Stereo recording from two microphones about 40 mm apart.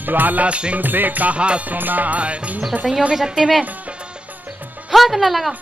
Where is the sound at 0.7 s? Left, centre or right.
Right.